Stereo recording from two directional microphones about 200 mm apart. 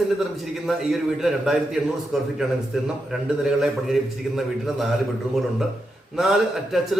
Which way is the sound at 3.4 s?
Centre (ahead or behind).